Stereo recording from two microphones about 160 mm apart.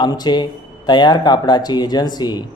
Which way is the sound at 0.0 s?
25° left (ahead or behind).